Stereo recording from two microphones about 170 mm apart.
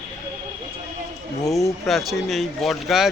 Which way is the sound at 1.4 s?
Centre (ahead or behind).